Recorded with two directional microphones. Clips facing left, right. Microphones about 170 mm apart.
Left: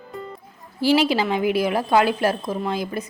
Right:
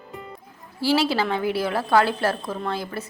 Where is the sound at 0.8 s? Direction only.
15° left (ahead or behind).